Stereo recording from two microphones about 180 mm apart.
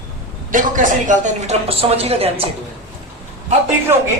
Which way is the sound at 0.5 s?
45° right (ahead or behind).